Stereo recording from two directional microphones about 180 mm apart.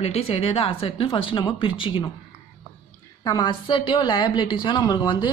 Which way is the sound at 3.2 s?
25° left (ahead or behind).